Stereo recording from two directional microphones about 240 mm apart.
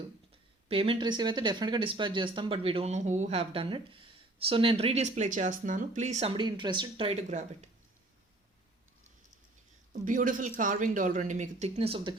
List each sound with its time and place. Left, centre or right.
0.7 s speech: right
10.0 s speech: right